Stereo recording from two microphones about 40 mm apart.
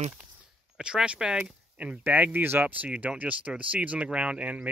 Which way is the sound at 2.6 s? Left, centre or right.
Right.